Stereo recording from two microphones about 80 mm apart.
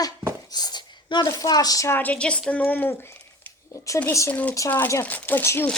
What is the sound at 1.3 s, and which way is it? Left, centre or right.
Child singing, left.